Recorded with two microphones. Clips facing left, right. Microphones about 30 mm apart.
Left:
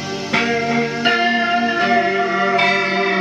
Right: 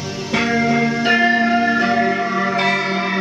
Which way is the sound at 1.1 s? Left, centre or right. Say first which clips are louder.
Right 3 dB; left.